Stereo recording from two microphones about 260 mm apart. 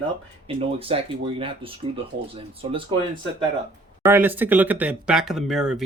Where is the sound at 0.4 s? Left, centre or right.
Right.